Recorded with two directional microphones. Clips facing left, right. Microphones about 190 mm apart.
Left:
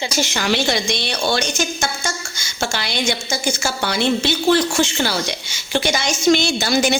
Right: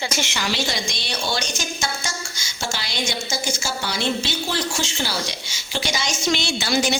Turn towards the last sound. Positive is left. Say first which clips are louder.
# left 4 dB
turn(degrees=45)  # may be behind; listen again after turning